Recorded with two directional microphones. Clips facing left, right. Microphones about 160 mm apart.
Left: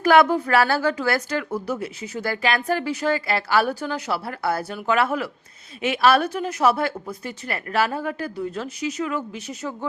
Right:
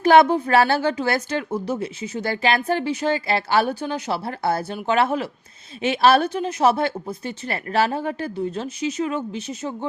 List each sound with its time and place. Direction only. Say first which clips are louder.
0.0 s a woman's voice: right 2 dB; 25° right (ahead or behind)